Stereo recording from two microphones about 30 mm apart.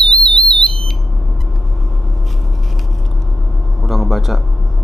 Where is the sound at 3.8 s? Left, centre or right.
Centre.